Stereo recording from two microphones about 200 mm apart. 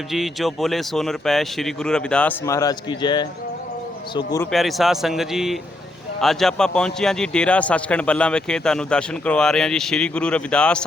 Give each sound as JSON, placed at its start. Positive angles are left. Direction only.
{"t": 0.1, "sound": "a man's voice", "side_deg": 0}
{"t": 4.5, "sound": "a man's voice", "side_deg": 0}